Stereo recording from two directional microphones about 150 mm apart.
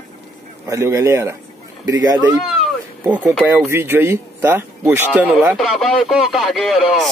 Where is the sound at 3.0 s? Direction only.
10° right (ahead or behind).